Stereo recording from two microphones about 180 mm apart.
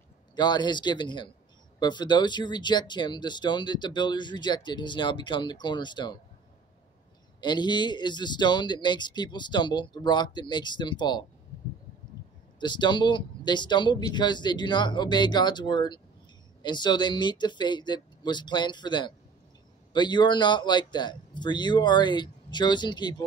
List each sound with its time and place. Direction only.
0.4 s speech: 25° left (ahead or behind)
7.3 s speech: 25° left (ahead or behind)
12.5 s speech: 25° left (ahead or behind)